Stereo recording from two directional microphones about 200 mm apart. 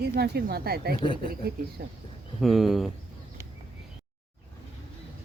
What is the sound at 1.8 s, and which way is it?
Speech, 50° right (ahead or behind).